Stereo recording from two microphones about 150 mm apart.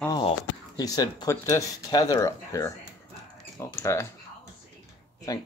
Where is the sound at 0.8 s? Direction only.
25° left (ahead or behind).